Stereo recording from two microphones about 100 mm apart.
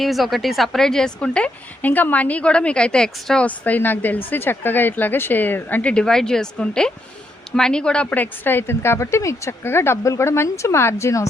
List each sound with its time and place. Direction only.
0.0 s a woman's voice: centre (ahead or behind); by 11.3 s 30° left (ahead or behind)